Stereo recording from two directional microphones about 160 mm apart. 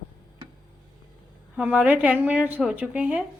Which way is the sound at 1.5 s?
10° right (ahead or behind).